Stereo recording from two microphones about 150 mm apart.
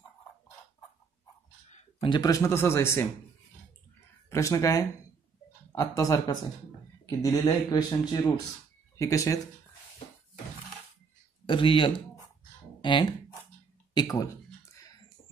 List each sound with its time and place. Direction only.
2.0 s speech: 30° left (ahead or behind)
4.3 s speech: 20° left (ahead or behind)
11.4 s speech: 35° left (ahead or behind)